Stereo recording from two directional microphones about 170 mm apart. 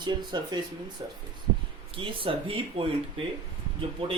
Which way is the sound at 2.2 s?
30° right (ahead or behind).